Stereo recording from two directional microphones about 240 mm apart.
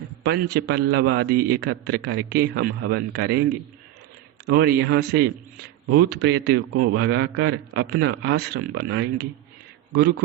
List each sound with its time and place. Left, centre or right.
0.2 s a man's voice: right
4.4 s a man's voice: right